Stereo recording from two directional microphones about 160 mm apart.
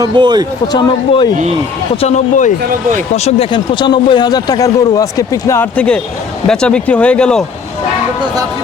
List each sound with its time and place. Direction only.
0.0 s speech: 25° right (ahead or behind)
0.7 s a man's voice: 30° left (ahead or behind)
2.0 s speech: 45° left (ahead or behind)
3.2 s a man's voice: 35° left (ahead or behind)
5.7 s speech: 5° left (ahead or behind)